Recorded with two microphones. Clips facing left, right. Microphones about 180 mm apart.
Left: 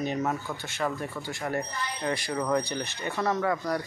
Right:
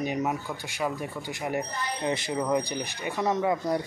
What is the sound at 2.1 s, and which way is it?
Speech, 20° right (ahead or behind).